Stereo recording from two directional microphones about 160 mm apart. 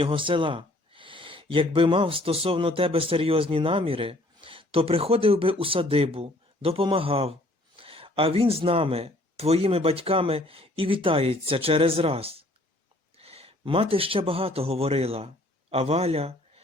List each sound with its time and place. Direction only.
0.0 s speech: 30° right (ahead or behind)